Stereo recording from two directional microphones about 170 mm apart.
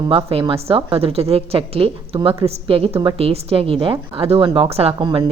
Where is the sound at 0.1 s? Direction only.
30° right (ahead or behind).